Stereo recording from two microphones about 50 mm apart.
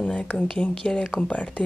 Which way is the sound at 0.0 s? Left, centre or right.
Centre.